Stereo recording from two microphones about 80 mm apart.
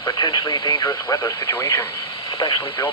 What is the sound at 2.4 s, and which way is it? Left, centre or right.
Radio, left.